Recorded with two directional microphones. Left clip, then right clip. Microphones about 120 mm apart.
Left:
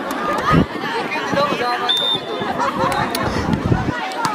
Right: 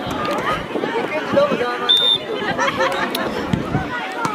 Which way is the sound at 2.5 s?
35° right (ahead or behind).